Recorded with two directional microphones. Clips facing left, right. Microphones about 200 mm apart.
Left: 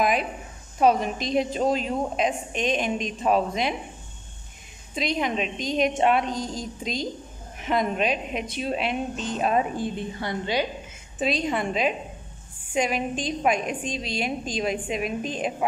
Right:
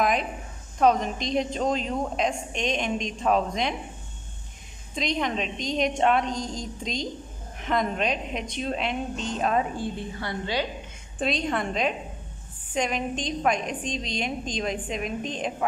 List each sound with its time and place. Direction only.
0.0 s a sound: 5° left (ahead or behind)
0.7 s a woman's voice: 5° left (ahead or behind)
4.9 s a woman's voice: 5° left (ahead or behind)
11.1 s a woman's voice: 5° left (ahead or behind)